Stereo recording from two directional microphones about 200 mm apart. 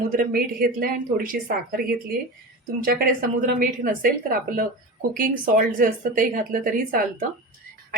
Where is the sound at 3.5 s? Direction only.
45° right (ahead or behind).